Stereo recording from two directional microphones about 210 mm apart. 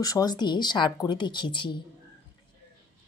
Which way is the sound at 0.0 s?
15° left (ahead or behind).